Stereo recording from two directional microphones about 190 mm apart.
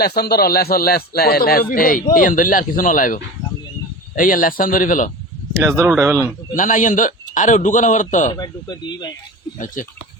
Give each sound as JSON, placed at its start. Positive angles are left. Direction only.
{"t": 0.0, "sound": "speech", "side_deg": 55}
{"t": 5.5, "sound": "speech", "side_deg": -15}
{"t": 6.5, "sound": "a man's voice", "side_deg": 45}
{"t": 8.3, "sound": "speech", "side_deg": 20}
{"t": 9.8, "sound": "speech", "side_deg": 45}